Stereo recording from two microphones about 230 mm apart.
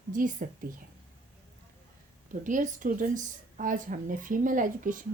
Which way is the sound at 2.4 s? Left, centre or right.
Right.